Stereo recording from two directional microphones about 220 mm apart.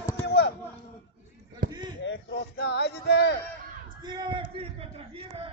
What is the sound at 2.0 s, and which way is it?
Speech, 55° left (ahead or behind).